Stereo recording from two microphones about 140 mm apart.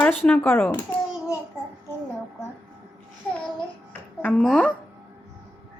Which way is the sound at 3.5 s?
10° left (ahead or behind).